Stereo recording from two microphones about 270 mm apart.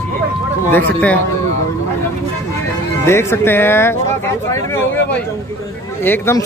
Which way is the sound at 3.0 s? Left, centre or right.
Centre.